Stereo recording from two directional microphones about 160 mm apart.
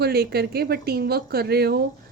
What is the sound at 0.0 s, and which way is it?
Speech, 85° right.